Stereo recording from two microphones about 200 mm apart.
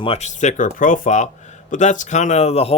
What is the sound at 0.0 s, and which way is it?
Speech, 30° left (ahead or behind).